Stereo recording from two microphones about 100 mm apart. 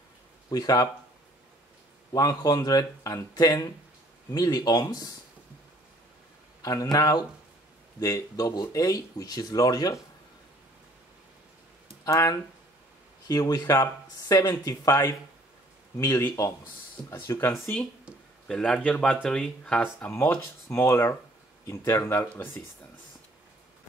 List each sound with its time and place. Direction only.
0.5 s speech: 40° left (ahead or behind)
2.1 s speech: 40° left (ahead or behind)
6.6 s speech: 35° left (ahead or behind)
12.0 s speech: 35° left (ahead or behind)
16.2 s speech: 25° left (ahead or behind)
18.5 s speech: 5° left (ahead or behind)
19.8 s speech: 25° left (ahead or behind)